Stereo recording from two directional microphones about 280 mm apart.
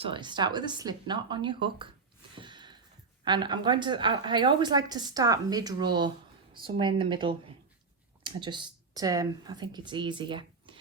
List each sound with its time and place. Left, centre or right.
0.0 s a woman's voice: centre
2.3 s a sound: centre
3.2 s a woman's voice: centre